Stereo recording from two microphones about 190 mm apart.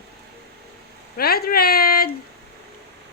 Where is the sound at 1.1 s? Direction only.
55° left (ahead or behind).